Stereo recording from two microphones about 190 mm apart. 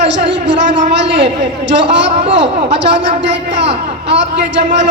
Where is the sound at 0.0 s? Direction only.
70° right (ahead or behind).